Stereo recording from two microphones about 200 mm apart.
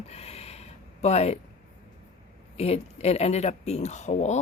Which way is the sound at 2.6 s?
30° left (ahead or behind).